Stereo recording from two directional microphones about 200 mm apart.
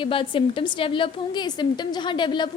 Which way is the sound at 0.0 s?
25° left (ahead or behind).